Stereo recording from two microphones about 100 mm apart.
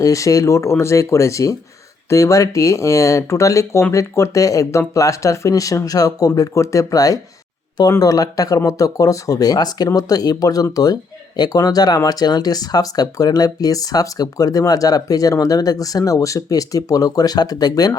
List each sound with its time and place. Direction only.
0.0 s speech: 35° left (ahead or behind)